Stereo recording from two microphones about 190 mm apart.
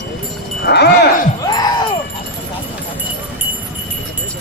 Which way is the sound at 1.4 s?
20° left (ahead or behind).